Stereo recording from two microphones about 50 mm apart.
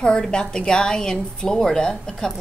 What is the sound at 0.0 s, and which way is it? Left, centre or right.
A woman's voice, centre.